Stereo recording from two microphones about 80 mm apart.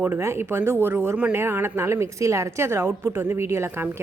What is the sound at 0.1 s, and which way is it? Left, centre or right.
A woman's voice, right.